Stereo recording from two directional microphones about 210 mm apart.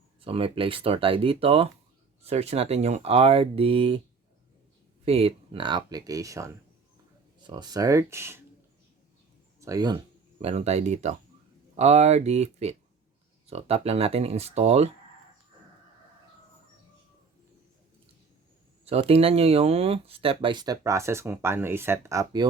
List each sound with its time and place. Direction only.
0.2 s speech: 25° right (ahead or behind)
5.0 s speech: 25° right (ahead or behind); by 8.4 s 10° right (ahead or behind)
9.6 s speech: 15° right (ahead or behind)
10.4 s speech: 30° right (ahead or behind)
18.9 s speech: 30° right (ahead or behind)